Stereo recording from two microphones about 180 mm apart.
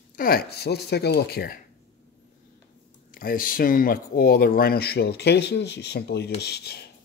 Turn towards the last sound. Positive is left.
turn(degrees=65)  # may be behind; listen again after turning